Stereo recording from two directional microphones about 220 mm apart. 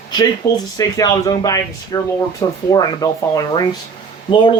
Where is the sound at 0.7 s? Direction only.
15° left (ahead or behind).